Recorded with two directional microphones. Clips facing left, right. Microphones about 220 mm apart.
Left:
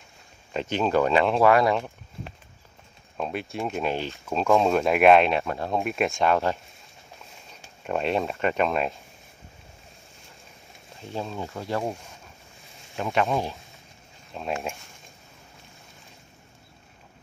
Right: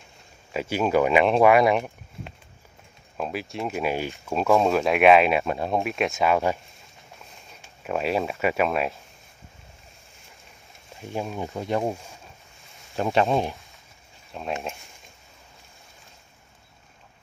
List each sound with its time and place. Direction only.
0.5 s speech: 5° right (ahead or behind)
3.2 s speech: 5° right (ahead or behind)
5.4 s speech: 15° right (ahead or behind)
5.9 s speech: centre (ahead or behind)
7.8 s speech: 5° right (ahead or behind)
11.0 s speech: 15° right (ahead or behind)
12.9 s speech: 35° right (ahead or behind)
14.3 s speech: centre (ahead or behind)